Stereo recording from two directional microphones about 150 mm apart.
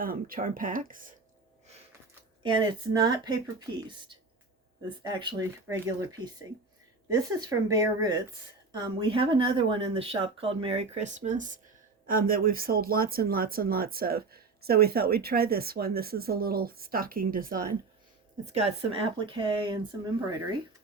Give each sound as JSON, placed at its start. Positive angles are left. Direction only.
{"t": 0.0, "sound": "speech", "side_deg": -70}
{"t": 2.4, "sound": "speech", "side_deg": -30}
{"t": 12.0, "sound": "speech", "side_deg": -70}
{"t": 18.4, "sound": "speech", "side_deg": -45}